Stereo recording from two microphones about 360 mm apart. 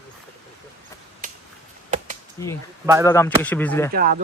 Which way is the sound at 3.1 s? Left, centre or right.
Centre.